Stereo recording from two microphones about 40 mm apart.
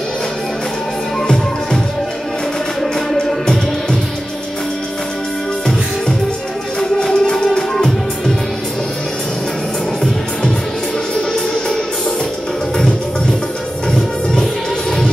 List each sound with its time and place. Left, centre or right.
1.2 s music: centre
2.8 s music: centre
7.0 s music: centre
13.9 s music: centre